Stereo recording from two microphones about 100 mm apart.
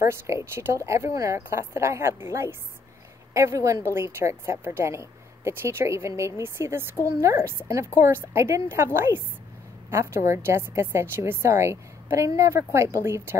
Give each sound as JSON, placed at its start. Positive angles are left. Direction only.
{"t": 0.0, "sound": "a woman's voice", "side_deg": -30}